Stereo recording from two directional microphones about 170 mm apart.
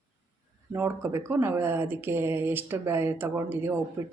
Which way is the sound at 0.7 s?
15° right (ahead or behind).